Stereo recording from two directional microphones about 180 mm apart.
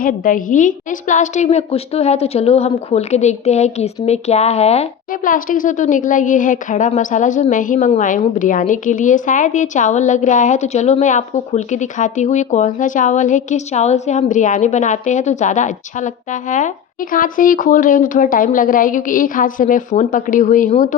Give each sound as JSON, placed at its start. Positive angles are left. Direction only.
{"t": 0.0, "sound": "a woman's voice", "side_deg": 50}